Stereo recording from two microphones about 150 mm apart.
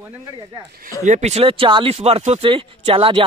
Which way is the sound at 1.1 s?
50° right (ahead or behind).